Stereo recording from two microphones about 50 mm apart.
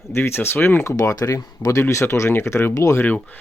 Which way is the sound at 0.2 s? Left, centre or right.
Left.